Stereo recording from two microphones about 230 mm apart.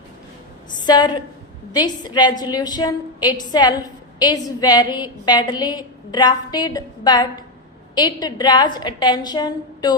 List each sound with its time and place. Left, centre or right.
0.9 s a woman's voice: centre